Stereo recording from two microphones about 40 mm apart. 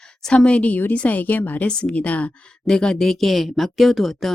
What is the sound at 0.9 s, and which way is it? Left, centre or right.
Speech, left.